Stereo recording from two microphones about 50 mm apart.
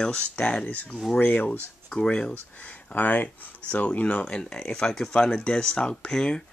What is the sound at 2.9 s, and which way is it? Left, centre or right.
Speech, left.